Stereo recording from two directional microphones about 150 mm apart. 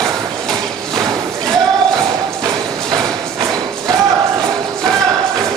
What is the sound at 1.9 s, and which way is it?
Thump, 25° right (ahead or behind).